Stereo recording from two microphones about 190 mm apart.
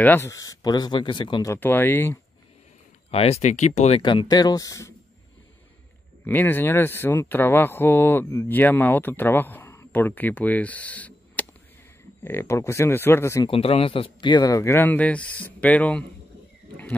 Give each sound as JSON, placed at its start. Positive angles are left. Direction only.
{"t": 0.0, "sound": "speech", "side_deg": 10}
{"t": 3.1, "sound": "speech", "side_deg": 30}
{"t": 6.2, "sound": "speech", "side_deg": 10}
{"t": 13.5, "sound": "speech", "side_deg": 30}